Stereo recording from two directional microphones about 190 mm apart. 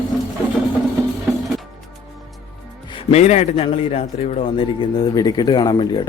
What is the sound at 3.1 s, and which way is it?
A man's voice, 35° left (ahead or behind).